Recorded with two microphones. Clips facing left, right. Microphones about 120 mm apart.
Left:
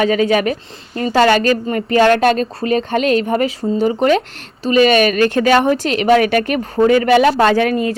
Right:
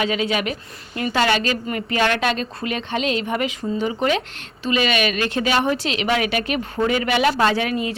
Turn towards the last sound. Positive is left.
turn(degrees=45)  # may be behind; listen again after turning